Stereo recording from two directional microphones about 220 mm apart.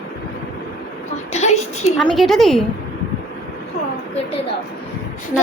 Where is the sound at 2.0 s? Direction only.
Centre (ahead or behind).